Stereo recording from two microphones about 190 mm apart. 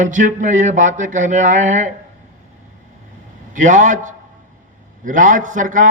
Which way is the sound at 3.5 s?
40° right (ahead or behind).